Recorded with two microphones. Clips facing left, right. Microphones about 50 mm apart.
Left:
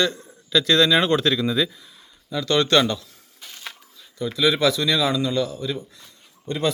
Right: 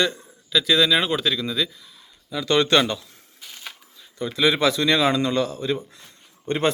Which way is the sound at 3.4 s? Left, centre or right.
Centre.